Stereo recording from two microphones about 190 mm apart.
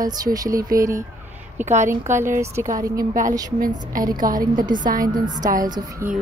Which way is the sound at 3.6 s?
45° right (ahead or behind).